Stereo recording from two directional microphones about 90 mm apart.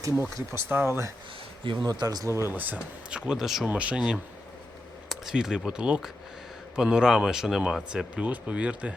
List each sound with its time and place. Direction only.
0.7 s speech: 25° right (ahead or behind)
1.6 s speech: 55° right (ahead or behind)
2.2 s speech: 30° right (ahead or behind)
2.6 s speech: 15° right (ahead or behind)
3.7 s speech: 15° right (ahead or behind)